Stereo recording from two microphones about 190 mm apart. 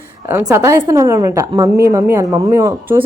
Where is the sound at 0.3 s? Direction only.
10° right (ahead or behind).